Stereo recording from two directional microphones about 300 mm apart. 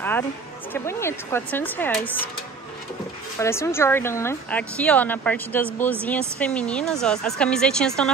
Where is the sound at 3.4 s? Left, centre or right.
Centre.